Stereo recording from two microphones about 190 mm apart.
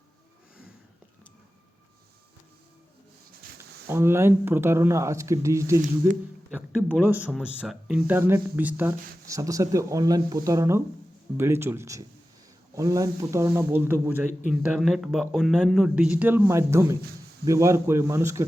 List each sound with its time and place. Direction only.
3.6 s speech: 15° right (ahead or behind)